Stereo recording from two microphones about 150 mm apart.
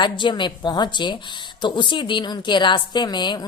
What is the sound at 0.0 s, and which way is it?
Speech, 30° left (ahead or behind).